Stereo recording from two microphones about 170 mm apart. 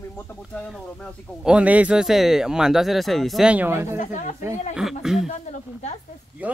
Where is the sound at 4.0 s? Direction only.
45° left (ahead or behind).